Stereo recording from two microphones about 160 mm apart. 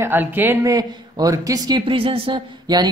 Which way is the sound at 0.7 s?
25° right (ahead or behind).